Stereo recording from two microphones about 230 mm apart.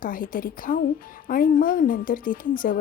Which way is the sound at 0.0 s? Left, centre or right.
Left.